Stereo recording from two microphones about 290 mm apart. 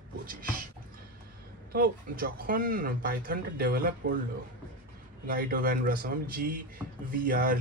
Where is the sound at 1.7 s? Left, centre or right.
Right.